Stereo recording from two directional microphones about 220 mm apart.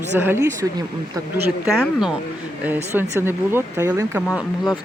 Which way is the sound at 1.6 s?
Centre (ahead or behind).